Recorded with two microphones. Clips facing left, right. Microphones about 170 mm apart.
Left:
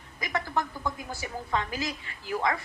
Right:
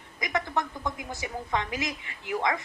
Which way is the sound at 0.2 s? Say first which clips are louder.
Right 1 dB; 20° right (ahead or behind).